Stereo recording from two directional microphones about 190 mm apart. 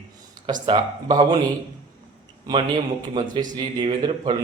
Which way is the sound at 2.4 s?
25° right (ahead or behind).